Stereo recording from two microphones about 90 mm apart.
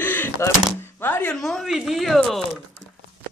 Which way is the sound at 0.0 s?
25° left (ahead or behind).